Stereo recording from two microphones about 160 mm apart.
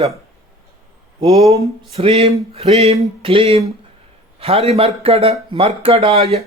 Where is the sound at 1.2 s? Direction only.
40° right (ahead or behind).